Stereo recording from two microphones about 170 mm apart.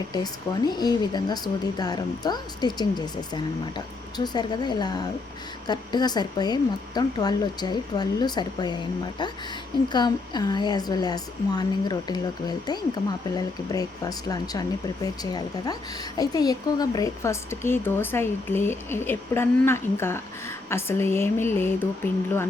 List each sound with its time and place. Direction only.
0.1 s a woman's voice: 25° left (ahead or behind)
9.9 s a woman's voice: 25° left (ahead or behind)